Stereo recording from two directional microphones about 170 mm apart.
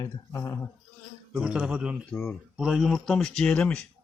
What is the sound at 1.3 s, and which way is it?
Speech, 5° right (ahead or behind).